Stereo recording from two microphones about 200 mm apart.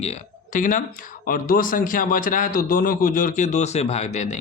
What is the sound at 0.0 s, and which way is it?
A man's voice, 35° left (ahead or behind).